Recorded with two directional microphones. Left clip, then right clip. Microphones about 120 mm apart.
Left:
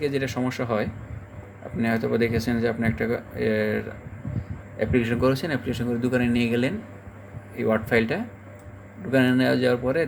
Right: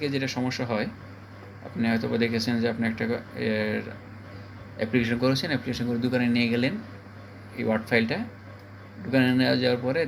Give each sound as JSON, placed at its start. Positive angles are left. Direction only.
{"t": 0.0, "sound": "speech", "side_deg": 80}
{"t": 4.8, "sound": "a man's voice", "side_deg": 55}
{"t": 5.0, "sound": "a man's voice", "side_deg": 80}
{"t": 7.5, "sound": "speech", "side_deg": 75}
{"t": 9.0, "sound": "speech", "side_deg": 70}